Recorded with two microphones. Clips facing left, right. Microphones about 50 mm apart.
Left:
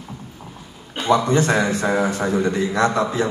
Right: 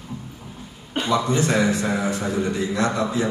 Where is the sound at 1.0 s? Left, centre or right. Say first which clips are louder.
Left 4 dB; left.